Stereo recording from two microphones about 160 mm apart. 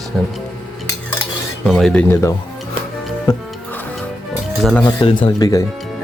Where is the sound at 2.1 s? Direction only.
15° left (ahead or behind).